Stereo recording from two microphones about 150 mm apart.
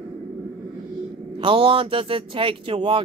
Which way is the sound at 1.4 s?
35° right (ahead or behind).